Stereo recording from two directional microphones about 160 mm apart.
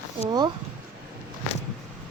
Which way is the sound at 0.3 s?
30° right (ahead or behind).